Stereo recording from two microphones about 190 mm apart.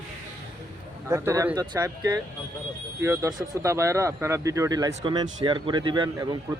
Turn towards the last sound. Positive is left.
turn(degrees=-20)  # may be behind; listen again after turning